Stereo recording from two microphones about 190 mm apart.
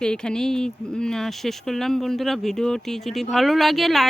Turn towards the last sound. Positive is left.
turn(degrees=0)  # may be behind; listen again after turning